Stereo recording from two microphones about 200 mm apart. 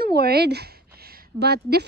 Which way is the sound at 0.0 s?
50° right (ahead or behind).